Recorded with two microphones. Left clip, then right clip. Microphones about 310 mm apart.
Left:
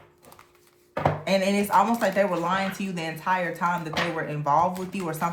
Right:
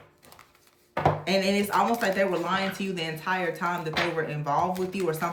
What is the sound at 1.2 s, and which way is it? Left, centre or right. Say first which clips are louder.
Speech: left 2 dB; centre.